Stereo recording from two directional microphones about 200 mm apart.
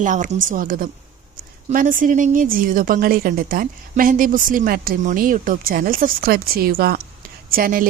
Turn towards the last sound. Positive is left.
turn(degrees=-45)  # may be behind; listen again after turning